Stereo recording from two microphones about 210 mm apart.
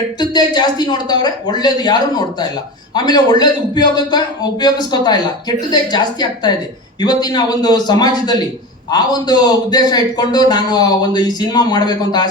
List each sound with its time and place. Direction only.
0.2 s a man's voice: 20° left (ahead or behind)